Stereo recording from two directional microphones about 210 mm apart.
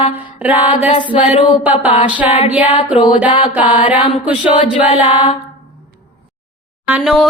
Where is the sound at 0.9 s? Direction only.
25° left (ahead or behind).